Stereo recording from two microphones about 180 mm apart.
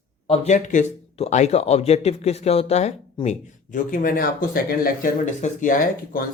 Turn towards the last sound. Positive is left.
turn(degrees=50)  # may be behind; listen again after turning